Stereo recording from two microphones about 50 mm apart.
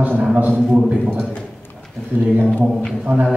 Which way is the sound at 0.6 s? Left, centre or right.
Centre.